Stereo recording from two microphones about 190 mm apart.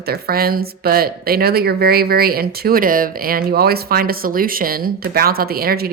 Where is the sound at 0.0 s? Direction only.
55° right (ahead or behind).